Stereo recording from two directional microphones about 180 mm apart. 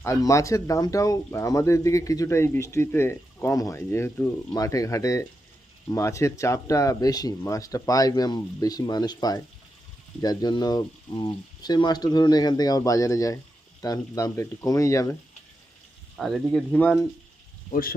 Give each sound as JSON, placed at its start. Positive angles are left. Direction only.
{"t": 0.0, "sound": "speech", "side_deg": 15}
{"t": 16.1, "sound": "speech", "side_deg": 0}
{"t": 17.7, "sound": "speech", "side_deg": 55}